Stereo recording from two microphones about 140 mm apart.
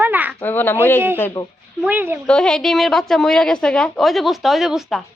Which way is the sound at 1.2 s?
25° left (ahead or behind).